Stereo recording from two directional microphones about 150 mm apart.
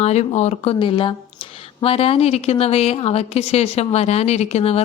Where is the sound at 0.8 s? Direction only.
35° left (ahead or behind).